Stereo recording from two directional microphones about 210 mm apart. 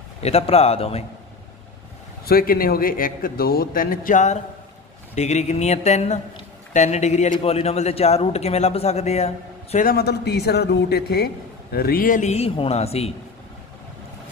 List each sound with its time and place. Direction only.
0.2 s a man's voice: 30° left (ahead or behind)
2.2 s a man's voice: 45° left (ahead or behind); by 13.1 s 30° left (ahead or behind)